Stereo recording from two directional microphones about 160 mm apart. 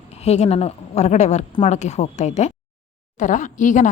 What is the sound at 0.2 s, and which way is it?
A woman's voice, 40° left (ahead or behind).